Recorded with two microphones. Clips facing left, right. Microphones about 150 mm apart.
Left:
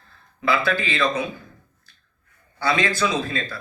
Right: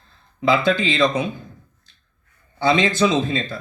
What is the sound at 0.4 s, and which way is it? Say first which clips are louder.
Speech: right 4 dB; 20° right (ahead or behind).